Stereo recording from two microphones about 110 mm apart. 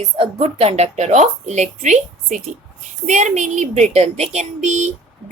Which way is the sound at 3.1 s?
90° right.